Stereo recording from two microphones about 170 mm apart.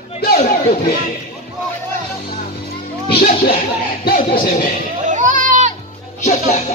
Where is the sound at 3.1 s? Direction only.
70° left (ahead or behind).